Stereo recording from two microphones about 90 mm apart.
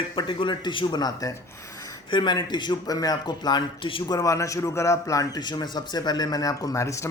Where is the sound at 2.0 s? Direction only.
60° left (ahead or behind); by 5.4 s 40° left (ahead or behind).